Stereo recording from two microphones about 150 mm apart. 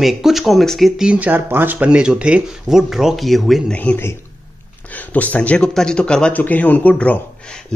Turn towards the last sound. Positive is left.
turn(degrees=10)  # may be behind; listen again after turning